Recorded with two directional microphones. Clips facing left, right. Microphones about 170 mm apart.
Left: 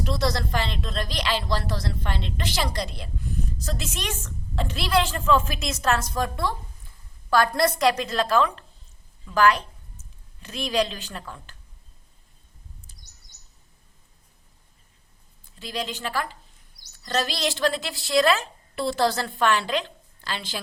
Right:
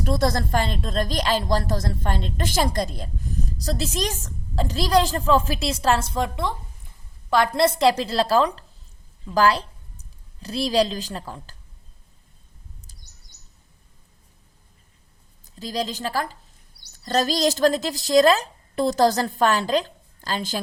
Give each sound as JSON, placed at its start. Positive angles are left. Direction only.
{"t": 0.0, "sound": "speech", "side_deg": -50}
{"t": 12.9, "sound": "a sound", "side_deg": -35}
{"t": 15.5, "sound": "speech", "side_deg": -40}